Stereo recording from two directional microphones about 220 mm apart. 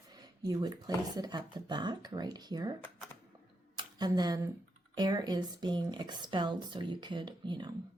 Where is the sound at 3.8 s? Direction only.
20° right (ahead or behind).